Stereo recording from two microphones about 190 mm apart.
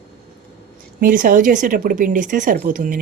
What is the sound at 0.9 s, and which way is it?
Speech, 45° right (ahead or behind).